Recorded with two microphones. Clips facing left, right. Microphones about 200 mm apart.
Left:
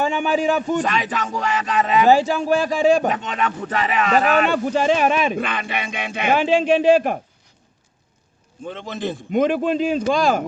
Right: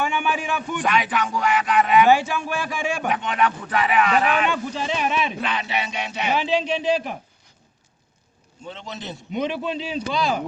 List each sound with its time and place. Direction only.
0.0 s a sound: 35° left (ahead or behind)
4.7 s speech: 50° left (ahead or behind)
8.6 s speech: 50° left (ahead or behind)